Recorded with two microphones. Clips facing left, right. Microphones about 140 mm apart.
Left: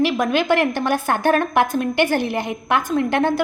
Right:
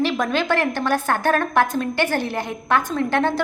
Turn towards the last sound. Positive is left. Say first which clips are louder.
# left 2 dB
turn(degrees=15)  # may be behind; listen again after turning